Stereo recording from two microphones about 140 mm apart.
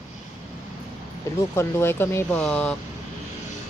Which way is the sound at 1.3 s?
20° left (ahead or behind).